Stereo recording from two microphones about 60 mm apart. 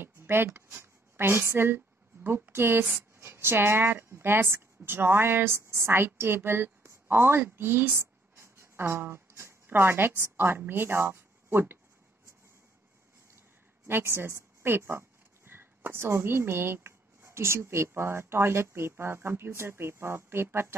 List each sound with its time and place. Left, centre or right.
0.0 s a woman's voice: right
13.8 s speech: right